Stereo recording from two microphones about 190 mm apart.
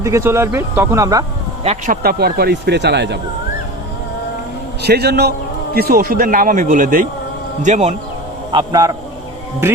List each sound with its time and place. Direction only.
0.0 s speech: 15° right (ahead or behind)
1.9 s speech: 55° right (ahead or behind)
4.8 s speech: 60° right (ahead or behind); by 7.9 s 35° right (ahead or behind)
8.5 s a man's voice: 20° right (ahead or behind)